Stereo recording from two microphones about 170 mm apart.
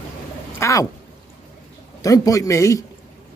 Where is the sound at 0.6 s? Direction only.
20° left (ahead or behind).